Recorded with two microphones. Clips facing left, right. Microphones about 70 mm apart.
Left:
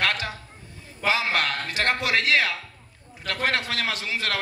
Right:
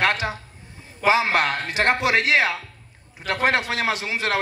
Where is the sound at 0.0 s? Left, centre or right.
Right.